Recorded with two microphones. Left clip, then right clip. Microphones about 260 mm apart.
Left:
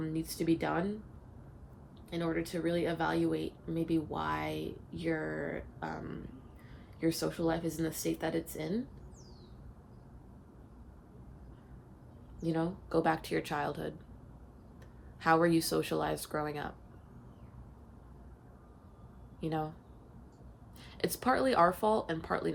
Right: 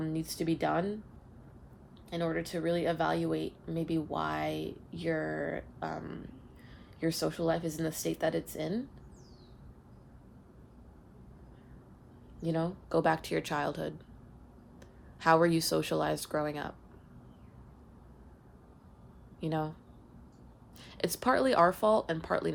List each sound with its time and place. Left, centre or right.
0.0 s speech: right
2.0 s speech: right
12.4 s speech: right
15.2 s speech: right
19.4 s speech: right
20.7 s speech: right